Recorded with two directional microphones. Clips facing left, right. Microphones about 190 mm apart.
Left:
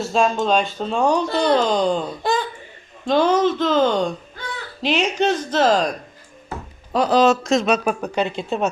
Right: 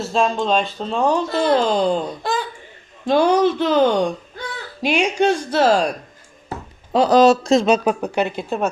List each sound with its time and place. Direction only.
0.0 s speech: centre (ahead or behind)
7.1 s speech: 45° right (ahead or behind)
7.4 s speech: 30° right (ahead or behind)
8.0 s speech: 10° right (ahead or behind)